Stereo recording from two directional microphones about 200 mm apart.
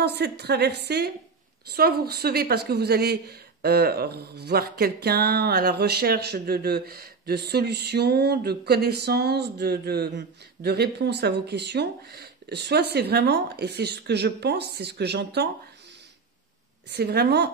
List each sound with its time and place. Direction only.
0.0 s a woman's voice: 55° right (ahead or behind)
16.9 s a woman's voice: 55° right (ahead or behind)